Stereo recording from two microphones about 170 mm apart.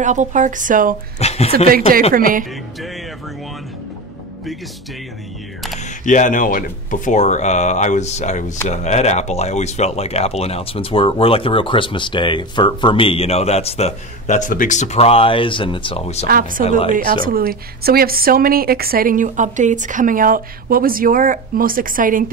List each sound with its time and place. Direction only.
0.0 s speech: 45° right (ahead or behind)
1.2 s speech: 40° left (ahead or behind)
1.7 s a woman's voice: 60° right (ahead or behind)
6.0 s speech: 45° left (ahead or behind)
16.3 s a woman's voice: 55° right (ahead or behind)
16.6 s speech: 35° left (ahead or behind)
17.2 s a woman's voice: 60° right (ahead or behind)